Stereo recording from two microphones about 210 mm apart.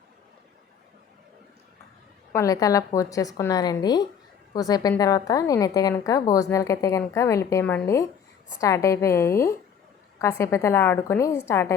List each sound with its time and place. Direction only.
2.3 s a woman's voice: 15° left (ahead or behind)